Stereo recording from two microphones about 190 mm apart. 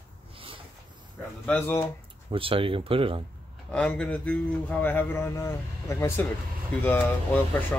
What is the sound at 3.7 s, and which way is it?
Speech, 5° left (ahead or behind).